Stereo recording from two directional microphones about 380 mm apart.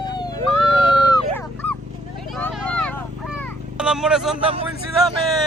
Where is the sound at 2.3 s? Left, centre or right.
Centre.